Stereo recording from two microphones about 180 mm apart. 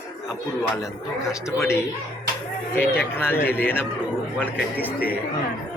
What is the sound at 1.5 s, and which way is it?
Speech, 15° left (ahead or behind).